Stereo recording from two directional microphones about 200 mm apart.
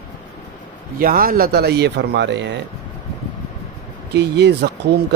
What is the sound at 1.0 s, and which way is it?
Speech, 45° right (ahead or behind).